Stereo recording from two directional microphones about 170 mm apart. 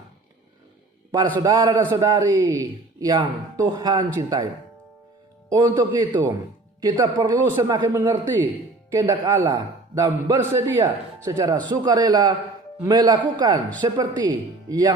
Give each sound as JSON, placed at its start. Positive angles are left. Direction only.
{"t": 1.4, "sound": "a man's voice", "side_deg": -25}
{"t": 5.5, "sound": "a man's voice", "side_deg": -20}